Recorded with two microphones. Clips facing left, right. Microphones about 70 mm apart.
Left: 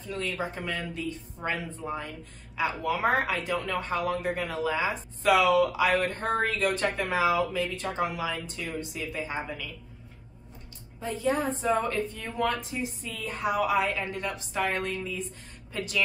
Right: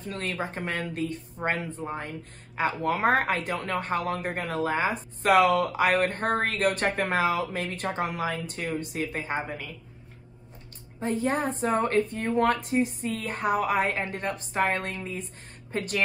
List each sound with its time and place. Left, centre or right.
0.0 s a woman's voice: right
11.0 s a woman's voice: right